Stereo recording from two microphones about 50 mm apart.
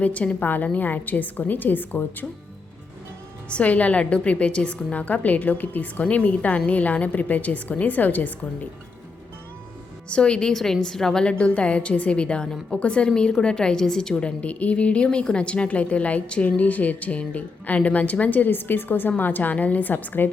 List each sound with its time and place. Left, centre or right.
0.0 s a woman's voice: left
3.5 s a woman's voice: left
10.1 s a woman's voice: centre
11.3 s a woman's voice: left